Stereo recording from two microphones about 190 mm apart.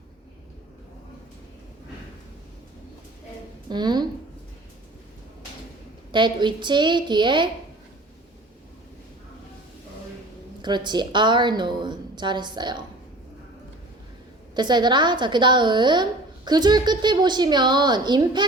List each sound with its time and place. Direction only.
3.7 s a woman's voice: 20° right (ahead or behind)
6.1 s a woman's voice: 25° right (ahead or behind)
10.6 s a woman's voice: 25° right (ahead or behind)
14.5 s a woman's voice: 25° right (ahead or behind)